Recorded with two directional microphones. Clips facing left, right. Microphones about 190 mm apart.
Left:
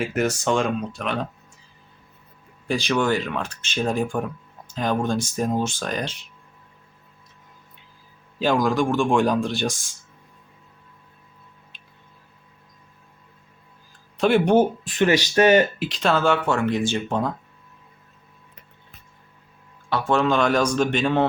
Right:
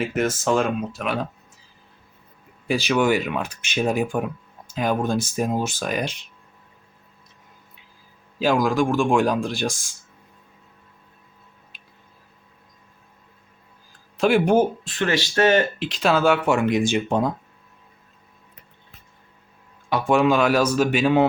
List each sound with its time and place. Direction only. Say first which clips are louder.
0.0 s speech: even; centre (ahead or behind)
2.6 s speech: right 2 dB; 5° right (ahead or behind)
8.4 s speech: right 1 dB; centre (ahead or behind)
14.2 s speech: even; centre (ahead or behind)
14.8 s speech: left 4 dB; 15° left (ahead or behind)
15.9 s speech: right 2 dB; 5° right (ahead or behind)
19.9 s speech: right 2 dB; 15° right (ahead or behind)